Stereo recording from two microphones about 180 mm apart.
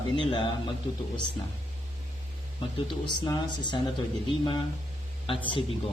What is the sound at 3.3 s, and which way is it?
Speech, 25° left (ahead or behind).